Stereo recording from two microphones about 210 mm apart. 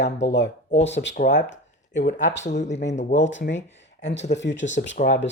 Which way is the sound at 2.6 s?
35° left (ahead or behind).